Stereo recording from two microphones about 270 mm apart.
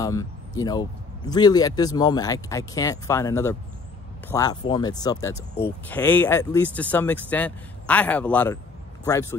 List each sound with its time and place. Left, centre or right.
0.0 s speech: centre